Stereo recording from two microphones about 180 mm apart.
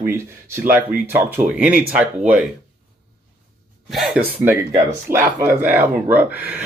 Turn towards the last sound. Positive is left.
turn(degrees=-10)  # may be behind; listen again after turning